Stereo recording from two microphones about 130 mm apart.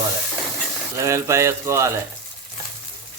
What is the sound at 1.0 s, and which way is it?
Speech, 20° right (ahead or behind).